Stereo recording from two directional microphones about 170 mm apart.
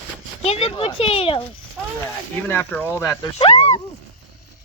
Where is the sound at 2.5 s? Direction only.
10° left (ahead or behind).